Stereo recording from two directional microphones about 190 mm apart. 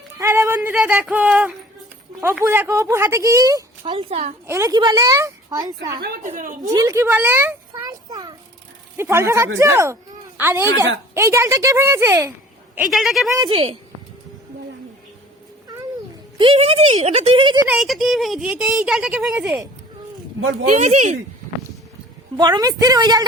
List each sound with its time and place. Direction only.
0.2 s speech: 15° right (ahead or behind); by 4.4 s 35° right (ahead or behind)
4.4 s a woman's voice: 15° right (ahead or behind)
6.2 s a woman's voice: 45° right (ahead or behind)
6.7 s speech: 15° right (ahead or behind)
7.9 s a sound: 20° right (ahead or behind)
9.0 s speech: 15° right (ahead or behind)
12.7 s speech: centre (ahead or behind)
13.3 s a woman's voice: 25° right (ahead or behind)
16.4 s speech: 30° right (ahead or behind)
17.7 s speech: centre (ahead or behind)
20.7 s speech: 35° right (ahead or behind)
22.4 s a woman's voice: 20° right (ahead or behind)